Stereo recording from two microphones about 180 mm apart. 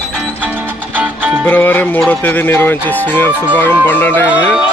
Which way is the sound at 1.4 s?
10° left (ahead or behind).